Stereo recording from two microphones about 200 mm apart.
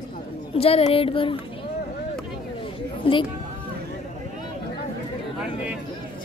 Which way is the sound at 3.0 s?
25° left (ahead or behind).